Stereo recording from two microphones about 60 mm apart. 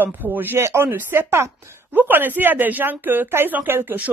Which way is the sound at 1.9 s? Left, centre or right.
Right.